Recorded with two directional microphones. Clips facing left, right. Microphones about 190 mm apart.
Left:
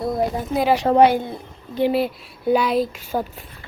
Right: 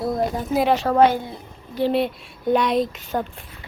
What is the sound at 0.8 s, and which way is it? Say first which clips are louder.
Speech: left 2 dB; 15° left (ahead or behind).